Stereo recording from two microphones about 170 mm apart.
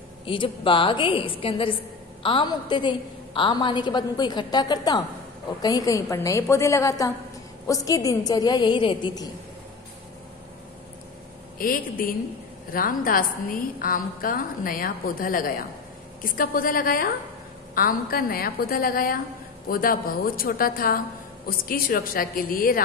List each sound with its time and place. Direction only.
0.2 s a woman's voice: 30° left (ahead or behind)
11.5 s a woman's voice: 55° left (ahead or behind)